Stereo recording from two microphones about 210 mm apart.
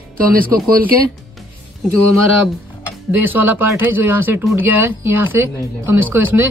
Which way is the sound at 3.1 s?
10° right (ahead or behind).